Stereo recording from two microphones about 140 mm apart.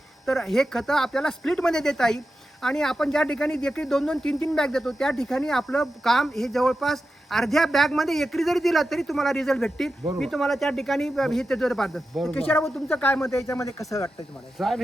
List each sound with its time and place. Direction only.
0.3 s speech: 5° left (ahead or behind)
12.4 s speech: 15° left (ahead or behind)
14.6 s speech: centre (ahead or behind)